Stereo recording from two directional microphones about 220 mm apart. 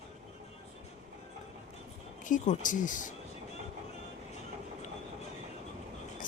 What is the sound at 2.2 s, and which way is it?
Speech, 35° left (ahead or behind).